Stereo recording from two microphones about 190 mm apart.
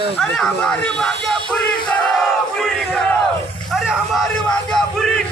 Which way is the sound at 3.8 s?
5° right (ahead or behind).